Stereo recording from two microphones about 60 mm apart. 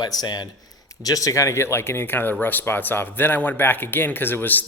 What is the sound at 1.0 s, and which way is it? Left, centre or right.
Speech, left.